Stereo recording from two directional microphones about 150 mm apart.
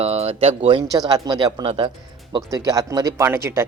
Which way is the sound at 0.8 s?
25° right (ahead or behind).